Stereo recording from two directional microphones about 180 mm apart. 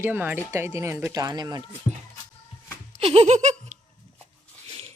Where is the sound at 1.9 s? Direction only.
30° left (ahead or behind).